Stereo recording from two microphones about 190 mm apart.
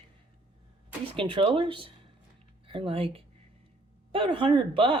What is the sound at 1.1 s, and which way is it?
Speech, 25° right (ahead or behind).